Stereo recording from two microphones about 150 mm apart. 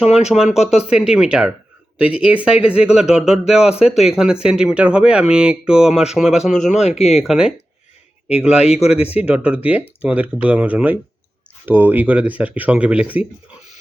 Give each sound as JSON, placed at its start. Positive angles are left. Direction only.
{"t": 0.0, "sound": "speech", "side_deg": -5}
{"t": 3.7, "sound": "a man's voice", "side_deg": 45}
{"t": 4.4, "sound": "speech", "side_deg": -5}
{"t": 6.6, "sound": "a man's voice", "side_deg": 50}
{"t": 7.2, "sound": "speech", "side_deg": -5}
{"t": 8.4, "sound": "a man's voice", "side_deg": 45}
{"t": 9.2, "sound": "speech", "side_deg": -10}